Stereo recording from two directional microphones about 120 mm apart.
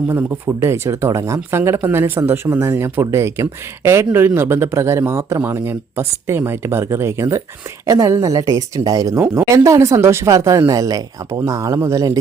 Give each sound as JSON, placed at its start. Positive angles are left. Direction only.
{"t": 0.1, "sound": "speech", "side_deg": -20}